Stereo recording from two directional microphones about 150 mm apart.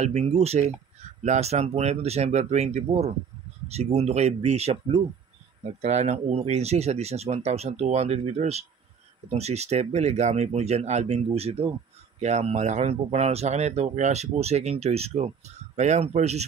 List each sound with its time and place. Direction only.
0.0 s speech: 45° right (ahead or behind)